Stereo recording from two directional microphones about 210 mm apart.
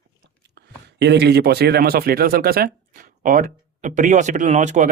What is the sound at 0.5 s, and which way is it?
Speech, 50° right (ahead or behind).